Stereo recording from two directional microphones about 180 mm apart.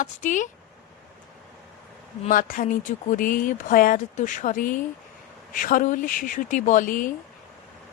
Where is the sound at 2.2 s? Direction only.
50° left (ahead or behind).